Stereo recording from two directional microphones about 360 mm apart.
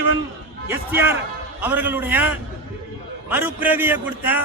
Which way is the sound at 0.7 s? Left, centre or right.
Centre.